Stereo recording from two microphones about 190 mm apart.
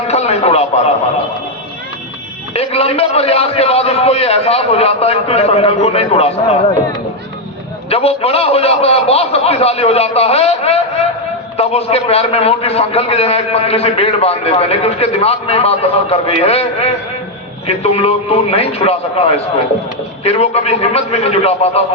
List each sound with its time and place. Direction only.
0.1 s a man's voice: 35° left (ahead or behind)
2.5 s a man's voice: 30° left (ahead or behind)
7.9 s a man's voice: 30° left (ahead or behind)